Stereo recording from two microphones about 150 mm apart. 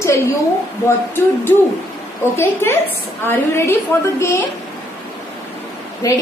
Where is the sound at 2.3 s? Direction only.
15° left (ahead or behind).